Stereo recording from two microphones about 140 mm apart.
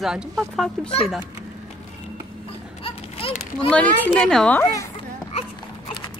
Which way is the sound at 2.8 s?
40° left (ahead or behind).